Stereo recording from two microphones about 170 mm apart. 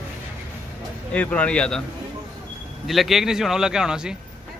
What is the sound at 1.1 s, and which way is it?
Speech, 5° left (ahead or behind).